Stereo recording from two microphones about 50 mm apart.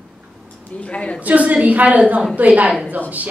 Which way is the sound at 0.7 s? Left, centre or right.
Left.